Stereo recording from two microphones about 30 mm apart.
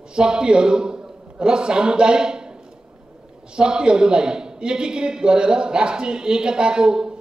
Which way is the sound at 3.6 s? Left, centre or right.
Right.